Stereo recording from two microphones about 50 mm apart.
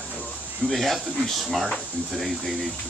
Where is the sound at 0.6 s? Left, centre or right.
Centre.